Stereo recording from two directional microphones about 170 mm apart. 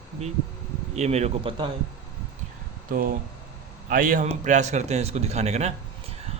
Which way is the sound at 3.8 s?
55° right (ahead or behind).